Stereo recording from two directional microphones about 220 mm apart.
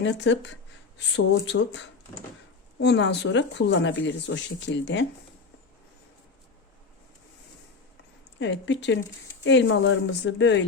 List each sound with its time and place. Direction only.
0.0 s speech: 55° left (ahead or behind)
2.8 s speech: 50° left (ahead or behind)
8.4 s speech: 55° left (ahead or behind)